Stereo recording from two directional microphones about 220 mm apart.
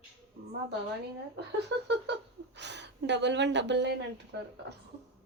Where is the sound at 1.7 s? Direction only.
55° right (ahead or behind).